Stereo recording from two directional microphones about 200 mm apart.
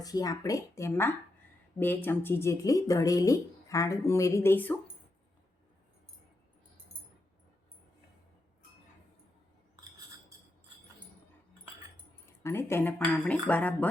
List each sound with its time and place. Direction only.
0.0 s speech: 20° left (ahead or behind)
12.4 s speech: 10° left (ahead or behind)